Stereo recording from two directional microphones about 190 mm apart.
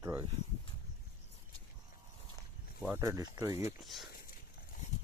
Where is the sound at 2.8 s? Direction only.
15° right (ahead or behind).